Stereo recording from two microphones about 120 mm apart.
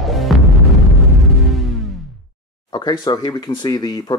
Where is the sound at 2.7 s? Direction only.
40° left (ahead or behind).